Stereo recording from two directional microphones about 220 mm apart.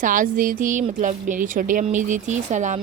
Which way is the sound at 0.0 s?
40° right (ahead or behind).